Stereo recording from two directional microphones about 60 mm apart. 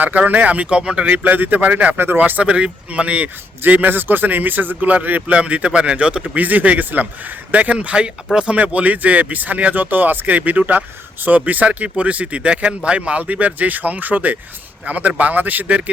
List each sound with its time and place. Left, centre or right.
0.0 s speech: right
1.1 s a man's voice: right
2.4 s a man's voice: centre